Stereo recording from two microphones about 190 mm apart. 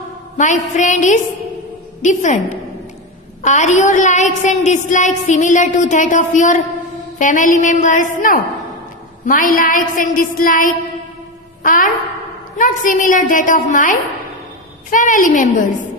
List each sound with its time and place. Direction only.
0.3 s a woman's voice: 40° left (ahead or behind)
3.4 s a woman's voice: 40° left (ahead or behind)